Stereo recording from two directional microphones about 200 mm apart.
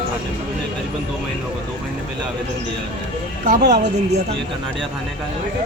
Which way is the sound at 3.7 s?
35° right (ahead or behind).